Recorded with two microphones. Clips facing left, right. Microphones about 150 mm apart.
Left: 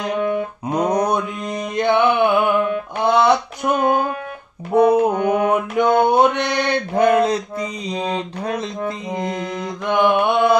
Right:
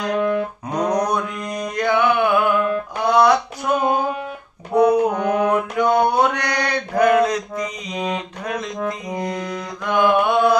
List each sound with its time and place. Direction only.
0.0 s music: 20° left (ahead or behind)
4.7 s mantra: 20° left (ahead or behind)